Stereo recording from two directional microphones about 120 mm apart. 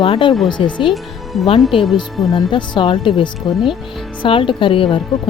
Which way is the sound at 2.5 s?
40° left (ahead or behind).